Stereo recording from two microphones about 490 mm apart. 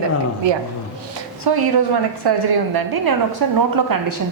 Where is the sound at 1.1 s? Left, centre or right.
Right.